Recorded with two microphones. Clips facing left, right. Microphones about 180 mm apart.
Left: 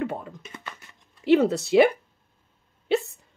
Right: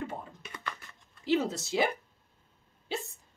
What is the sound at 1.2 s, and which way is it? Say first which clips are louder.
Speech: left 9 dB; 65° left (ahead or behind).